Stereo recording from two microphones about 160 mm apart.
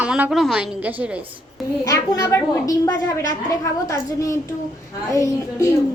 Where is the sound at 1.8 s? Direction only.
20° left (ahead or behind).